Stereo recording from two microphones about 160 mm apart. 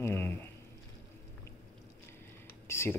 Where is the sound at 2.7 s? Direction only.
15° left (ahead or behind).